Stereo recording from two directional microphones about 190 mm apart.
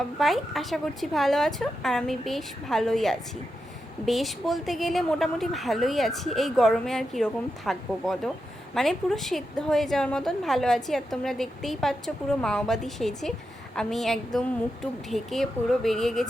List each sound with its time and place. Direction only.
0.2 s a woman's voice: centre (ahead or behind)